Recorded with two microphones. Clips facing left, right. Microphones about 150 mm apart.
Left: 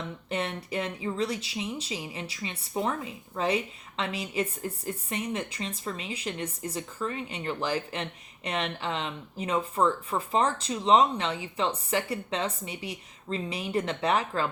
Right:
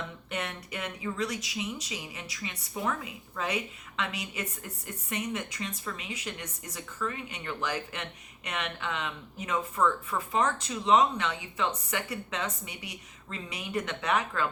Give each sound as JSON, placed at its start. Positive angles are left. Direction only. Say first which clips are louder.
{"t": 0.3, "sound": "speech", "louder": "left 6 dB", "side_deg": 30}